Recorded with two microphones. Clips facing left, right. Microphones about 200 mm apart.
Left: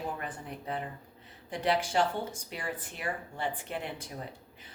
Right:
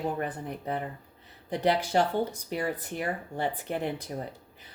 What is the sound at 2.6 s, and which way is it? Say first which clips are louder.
Speech: right 5 dB; 40° right (ahead or behind).